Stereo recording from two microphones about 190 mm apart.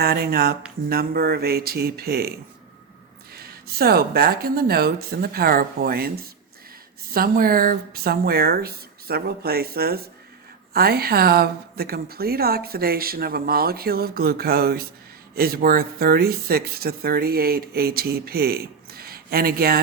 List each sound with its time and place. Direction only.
0.0 s speech: 55° right (ahead or behind)
3.3 s speech: 55° right (ahead or behind)